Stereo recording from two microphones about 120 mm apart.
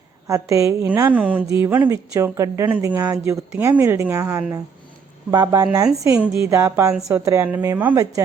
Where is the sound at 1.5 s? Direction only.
25° right (ahead or behind).